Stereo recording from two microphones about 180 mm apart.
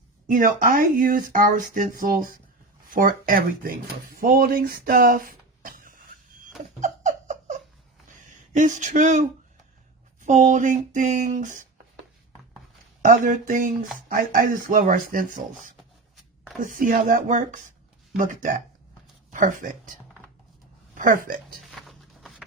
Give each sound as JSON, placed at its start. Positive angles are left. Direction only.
{"t": 0.3, "sound": "speech", "side_deg": -45}
{"t": 6.7, "sound": "a sound", "side_deg": -45}
{"t": 8.5, "sound": "speech", "side_deg": -45}
{"t": 10.2, "sound": "speech", "side_deg": -40}
{"t": 13.0, "sound": "speech", "side_deg": -45}
{"t": 19.3, "sound": "speech", "side_deg": -45}
{"t": 21.8, "sound": "a sound", "side_deg": 0}